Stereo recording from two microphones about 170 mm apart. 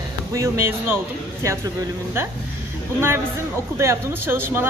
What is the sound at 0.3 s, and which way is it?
Speech, 15° right (ahead or behind).